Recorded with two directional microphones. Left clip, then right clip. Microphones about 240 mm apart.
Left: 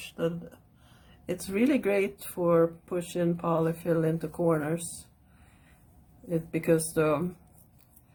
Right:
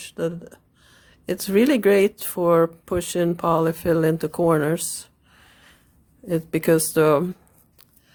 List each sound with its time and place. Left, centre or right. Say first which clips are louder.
0.1 s speech: right 5 dB; right
1.3 s speech: right 8 dB; right
6.2 s speech: right 7 dB; right